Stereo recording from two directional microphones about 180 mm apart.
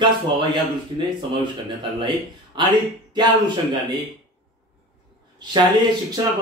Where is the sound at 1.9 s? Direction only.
25° right (ahead or behind).